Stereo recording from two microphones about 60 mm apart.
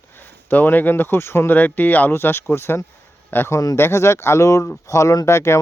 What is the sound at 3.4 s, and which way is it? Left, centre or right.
Speech, left.